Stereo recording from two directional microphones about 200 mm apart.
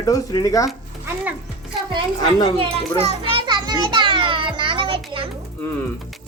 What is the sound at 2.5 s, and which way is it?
Children playing, 30° right (ahead or behind).